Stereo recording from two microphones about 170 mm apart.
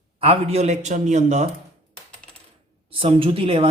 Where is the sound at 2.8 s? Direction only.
30° right (ahead or behind).